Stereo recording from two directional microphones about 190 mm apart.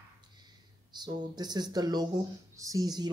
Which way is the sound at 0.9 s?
20° right (ahead or behind).